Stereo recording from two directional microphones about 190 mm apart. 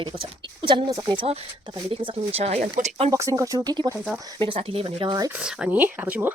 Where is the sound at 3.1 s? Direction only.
15° right (ahead or behind).